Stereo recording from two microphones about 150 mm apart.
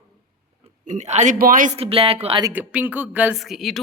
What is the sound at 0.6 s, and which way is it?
Speech, 50° right (ahead or behind).